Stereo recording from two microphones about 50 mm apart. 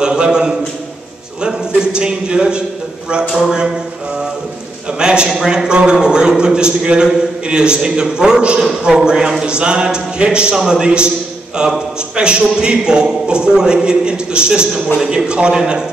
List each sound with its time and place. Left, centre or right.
0.0 s a sound: centre
1.4 s speech: centre
4.9 s a man's voice: centre